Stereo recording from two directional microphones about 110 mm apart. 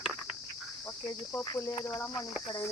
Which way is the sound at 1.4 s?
40° left (ahead or behind).